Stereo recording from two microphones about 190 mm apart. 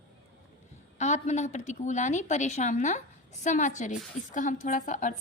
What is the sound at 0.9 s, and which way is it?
A woman's voice, 40° left (ahead or behind).